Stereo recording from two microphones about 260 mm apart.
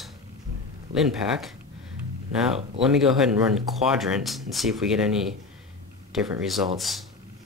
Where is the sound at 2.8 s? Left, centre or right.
Centre.